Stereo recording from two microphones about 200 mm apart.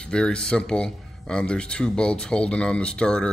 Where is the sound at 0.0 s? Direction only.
5° left (ahead or behind).